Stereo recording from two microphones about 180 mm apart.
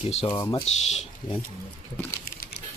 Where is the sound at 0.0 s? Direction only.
35° left (ahead or behind).